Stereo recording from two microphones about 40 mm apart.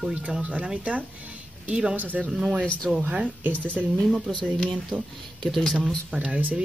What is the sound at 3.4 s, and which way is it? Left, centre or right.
Speech, right.